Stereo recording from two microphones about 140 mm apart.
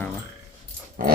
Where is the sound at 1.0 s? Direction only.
75° right (ahead or behind).